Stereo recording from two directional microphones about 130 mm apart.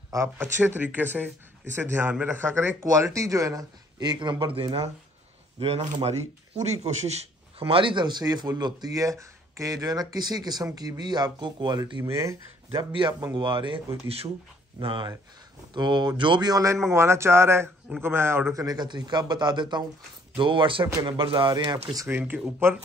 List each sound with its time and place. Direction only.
0.1 s speech: 20° right (ahead or behind)
12.0 s speech: 20° right (ahead or behind)
13.2 s speech: 35° right (ahead or behind)
14.0 s speech: 50° right (ahead or behind)
21.9 s speech: 20° right (ahead or behind)
22.2 s speech: 10° right (ahead or behind)